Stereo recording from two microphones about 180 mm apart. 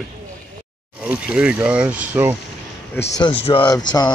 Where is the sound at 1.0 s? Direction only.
5° right (ahead or behind).